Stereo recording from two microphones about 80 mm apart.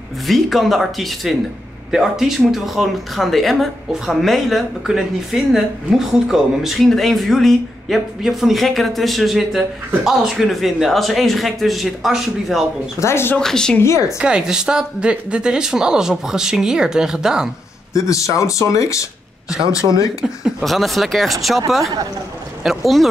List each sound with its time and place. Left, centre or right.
0.3 s speech: centre
13.0 s speech: left
13.4 s speech: centre
13.7 s speech: left
14.2 s speech: centre
17.9 s speech: left
20.6 s speech: centre